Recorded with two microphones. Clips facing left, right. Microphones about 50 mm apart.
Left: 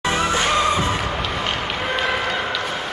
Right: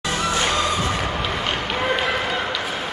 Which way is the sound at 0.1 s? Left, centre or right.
Left.